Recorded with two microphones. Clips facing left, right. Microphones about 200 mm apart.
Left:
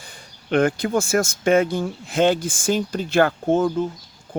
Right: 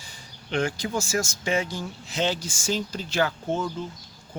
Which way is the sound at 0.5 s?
55° left (ahead or behind).